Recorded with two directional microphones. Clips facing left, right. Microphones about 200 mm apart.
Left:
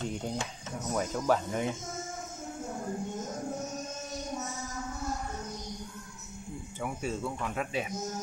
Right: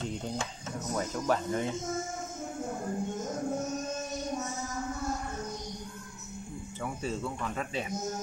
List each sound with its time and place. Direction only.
0.9 s speech: 10° left (ahead or behind)
6.8 s speech: 10° left (ahead or behind)